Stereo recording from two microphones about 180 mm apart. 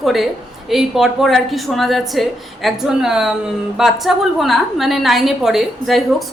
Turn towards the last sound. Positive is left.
turn(degrees=0)  # may be behind; listen again after turning